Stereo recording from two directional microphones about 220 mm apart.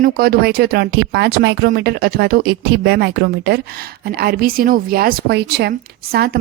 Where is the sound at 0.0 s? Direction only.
40° right (ahead or behind).